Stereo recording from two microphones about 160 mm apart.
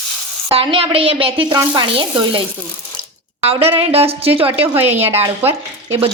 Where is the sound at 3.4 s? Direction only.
40° right (ahead or behind).